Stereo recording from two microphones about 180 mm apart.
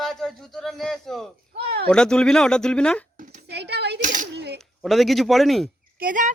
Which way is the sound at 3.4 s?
65° right (ahead or behind).